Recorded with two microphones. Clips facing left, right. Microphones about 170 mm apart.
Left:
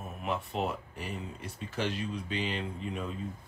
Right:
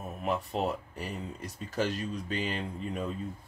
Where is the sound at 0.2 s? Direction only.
40° right (ahead or behind).